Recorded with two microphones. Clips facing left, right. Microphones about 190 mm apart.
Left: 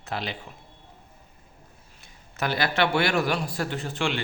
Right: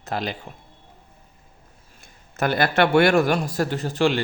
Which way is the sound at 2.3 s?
50° right (ahead or behind).